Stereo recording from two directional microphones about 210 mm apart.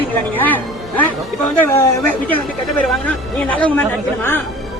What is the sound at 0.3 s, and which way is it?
Speech, 10° left (ahead or behind).